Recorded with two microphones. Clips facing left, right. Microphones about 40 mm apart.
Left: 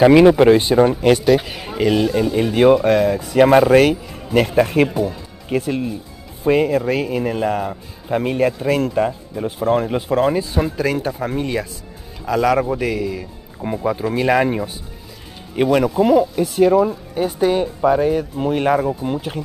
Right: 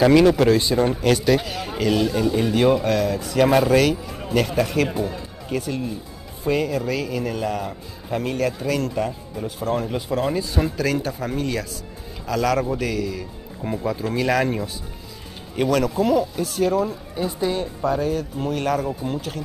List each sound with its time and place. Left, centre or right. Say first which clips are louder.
0.0 s a man's voice: left 5 dB; left
1.2 s speech: left 4 dB; centre
1.8 s a man's voice: left 4 dB; centre
2.8 s a man's voice: left 6 dB; left
17.1 s a man's voice: left 6 dB; left